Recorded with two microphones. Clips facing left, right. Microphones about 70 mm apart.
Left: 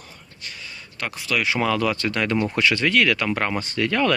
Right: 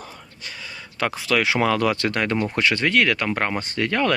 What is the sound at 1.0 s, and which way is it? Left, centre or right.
Speech, right.